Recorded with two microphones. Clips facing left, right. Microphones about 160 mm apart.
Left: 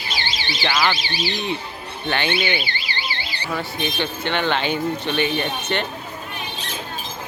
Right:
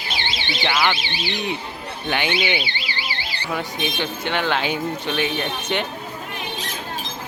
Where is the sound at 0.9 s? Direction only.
40° left (ahead or behind).